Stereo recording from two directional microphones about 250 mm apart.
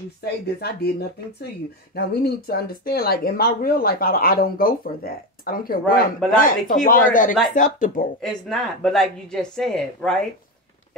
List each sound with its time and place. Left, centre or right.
0.2 s speech: left
2.0 s speech: left
8.2 s a woman's voice: centre